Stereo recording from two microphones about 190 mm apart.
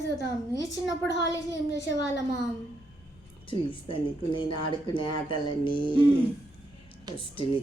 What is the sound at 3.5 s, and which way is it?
Speech, 25° left (ahead or behind).